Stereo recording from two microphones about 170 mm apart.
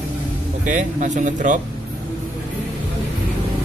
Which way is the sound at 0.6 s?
45° right (ahead or behind).